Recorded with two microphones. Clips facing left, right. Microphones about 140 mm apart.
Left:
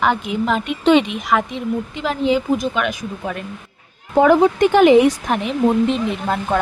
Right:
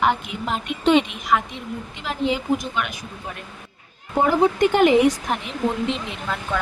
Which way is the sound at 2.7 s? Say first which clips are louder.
Left 6 dB; 90° left.